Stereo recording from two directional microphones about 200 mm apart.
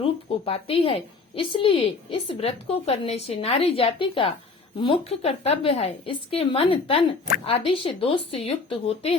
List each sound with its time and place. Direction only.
0.0 s a woman's voice: 30° left (ahead or behind)